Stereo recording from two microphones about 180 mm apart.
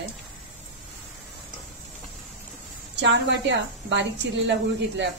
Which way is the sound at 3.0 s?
80° right.